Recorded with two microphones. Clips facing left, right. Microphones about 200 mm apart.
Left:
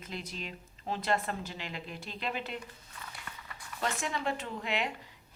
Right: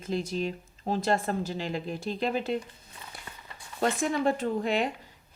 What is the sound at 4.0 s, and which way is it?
Speech, 45° right (ahead or behind).